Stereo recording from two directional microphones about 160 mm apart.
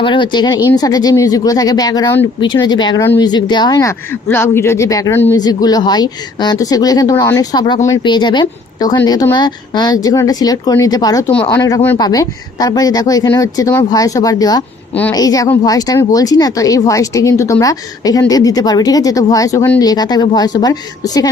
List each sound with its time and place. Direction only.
0.0 s a woman's voice: 30° left (ahead or behind)